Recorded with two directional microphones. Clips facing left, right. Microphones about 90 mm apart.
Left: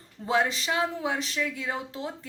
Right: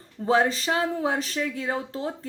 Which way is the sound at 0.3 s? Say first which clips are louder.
Right 4 dB; 35° right (ahead or behind).